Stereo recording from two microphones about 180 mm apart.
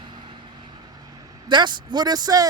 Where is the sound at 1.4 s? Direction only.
25° right (ahead or behind).